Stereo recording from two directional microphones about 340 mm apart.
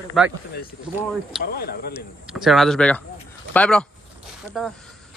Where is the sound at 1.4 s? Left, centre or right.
Left.